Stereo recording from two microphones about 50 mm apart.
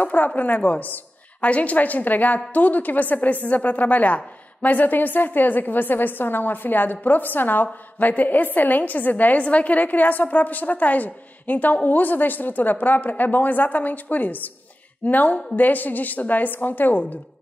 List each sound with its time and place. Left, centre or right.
0.0 s a woman's voice: left